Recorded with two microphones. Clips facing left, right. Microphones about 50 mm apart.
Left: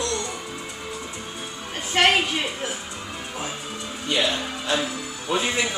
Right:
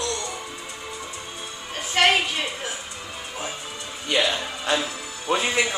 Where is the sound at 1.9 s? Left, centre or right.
Centre.